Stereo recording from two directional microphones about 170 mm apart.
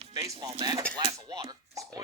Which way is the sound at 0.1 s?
20° right (ahead or behind).